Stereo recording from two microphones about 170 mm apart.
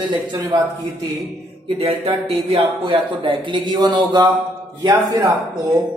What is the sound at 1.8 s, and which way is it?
A man's voice, 35° right (ahead or behind).